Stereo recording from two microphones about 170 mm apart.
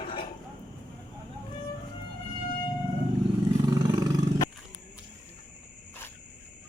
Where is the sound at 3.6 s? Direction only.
20° right (ahead or behind).